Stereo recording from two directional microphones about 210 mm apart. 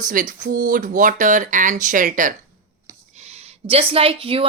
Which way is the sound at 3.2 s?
30° right (ahead or behind).